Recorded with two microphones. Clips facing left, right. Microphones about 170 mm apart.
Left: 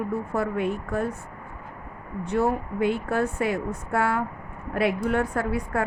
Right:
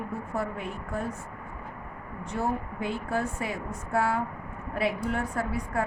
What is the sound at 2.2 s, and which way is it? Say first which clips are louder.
Speech: left 6 dB; 65° left (ahead or behind).